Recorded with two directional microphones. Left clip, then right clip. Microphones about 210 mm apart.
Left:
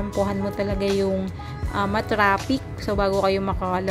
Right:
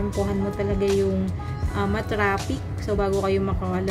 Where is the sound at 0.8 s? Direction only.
Centre (ahead or behind).